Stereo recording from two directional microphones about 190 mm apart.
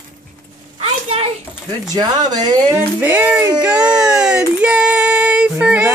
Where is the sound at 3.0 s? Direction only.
10° right (ahead or behind).